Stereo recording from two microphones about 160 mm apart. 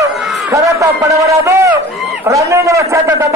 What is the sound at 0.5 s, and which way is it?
A man's voice, 20° right (ahead or behind).